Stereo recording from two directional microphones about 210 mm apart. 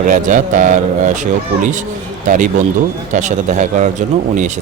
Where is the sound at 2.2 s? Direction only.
35° right (ahead or behind).